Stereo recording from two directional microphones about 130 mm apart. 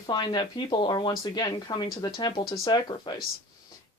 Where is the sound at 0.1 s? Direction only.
35° left (ahead or behind).